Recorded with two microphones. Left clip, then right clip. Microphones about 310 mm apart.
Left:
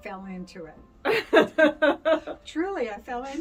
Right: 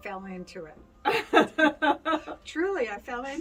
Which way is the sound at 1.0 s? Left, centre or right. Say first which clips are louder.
Left 2 dB; centre.